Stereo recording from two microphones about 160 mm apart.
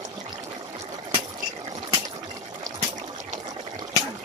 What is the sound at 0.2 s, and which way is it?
Water, 25° right (ahead or behind).